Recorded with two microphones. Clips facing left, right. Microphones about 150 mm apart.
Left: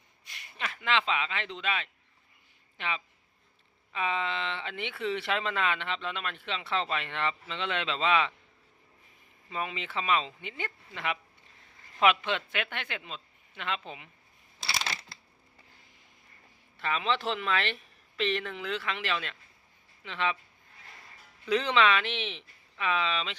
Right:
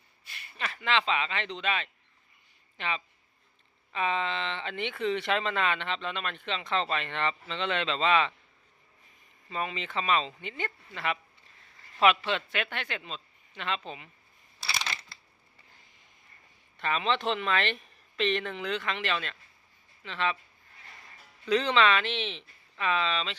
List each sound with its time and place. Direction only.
0.3 s a sound: 20° left (ahead or behind)
0.6 s speech: 10° left (ahead or behind)
9.5 s speech: 10° left (ahead or behind)
16.8 s speech: 5° left (ahead or behind)
21.4 s speech: 10° left (ahead or behind)